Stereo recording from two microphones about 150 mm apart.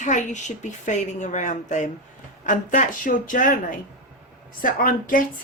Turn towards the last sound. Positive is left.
turn(degrees=70)  # may be behind; listen again after turning